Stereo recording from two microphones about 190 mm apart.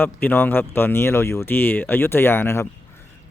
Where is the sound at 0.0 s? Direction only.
10° left (ahead or behind).